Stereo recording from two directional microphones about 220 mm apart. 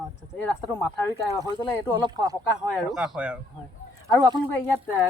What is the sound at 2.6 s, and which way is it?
Speech, centre (ahead or behind).